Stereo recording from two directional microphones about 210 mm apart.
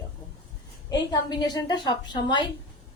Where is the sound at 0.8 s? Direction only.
20° left (ahead or behind).